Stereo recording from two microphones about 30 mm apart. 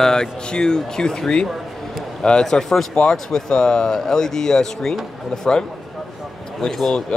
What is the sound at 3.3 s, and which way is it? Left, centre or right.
Speech, left.